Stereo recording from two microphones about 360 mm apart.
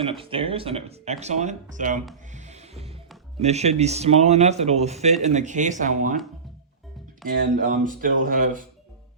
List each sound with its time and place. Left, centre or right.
0.0 s speech: centre
2.3 s music: centre
3.4 s speech: centre
7.3 s speech: right